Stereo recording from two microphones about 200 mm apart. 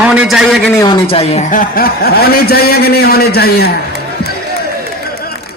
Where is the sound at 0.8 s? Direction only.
25° left (ahead or behind); by 3.8 s 50° left (ahead or behind).